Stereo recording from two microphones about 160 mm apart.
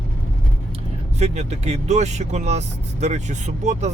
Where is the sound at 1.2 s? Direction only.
45° right (ahead or behind).